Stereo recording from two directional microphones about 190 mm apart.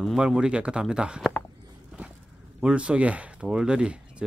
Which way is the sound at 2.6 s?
5° right (ahead or behind).